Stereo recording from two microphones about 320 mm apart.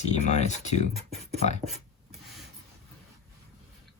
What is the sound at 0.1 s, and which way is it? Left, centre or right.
Speech, left.